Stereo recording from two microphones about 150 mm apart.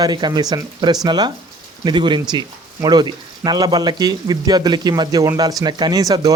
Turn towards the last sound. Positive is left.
turn(degrees=-25)  # may be behind; listen again after turning